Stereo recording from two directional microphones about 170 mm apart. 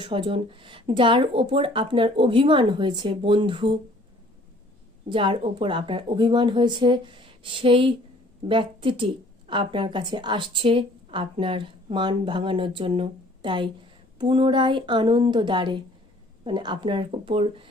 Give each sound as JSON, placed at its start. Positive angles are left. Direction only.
{"t": 0.0, "sound": "speech", "side_deg": -30}
{"t": 5.0, "sound": "a woman's voice", "side_deg": -30}